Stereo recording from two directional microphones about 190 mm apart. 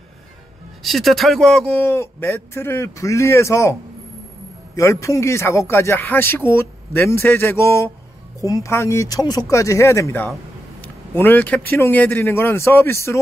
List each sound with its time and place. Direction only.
0.8 s speech: centre (ahead or behind)
1.8 s speech: 15° left (ahead or behind)
4.7 s speech: 15° left (ahead or behind)
10.8 s vehicle: 10° left (ahead or behind)
11.7 s speech: 10° left (ahead or behind)